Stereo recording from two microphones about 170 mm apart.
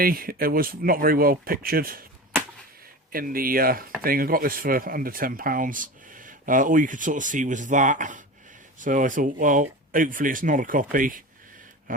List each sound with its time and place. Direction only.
0.0 s speech: 55° right (ahead or behind)
3.1 s speech: 60° right (ahead or behind)